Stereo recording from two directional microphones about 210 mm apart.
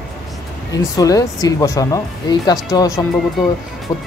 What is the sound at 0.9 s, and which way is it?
Speech, 15° left (ahead or behind).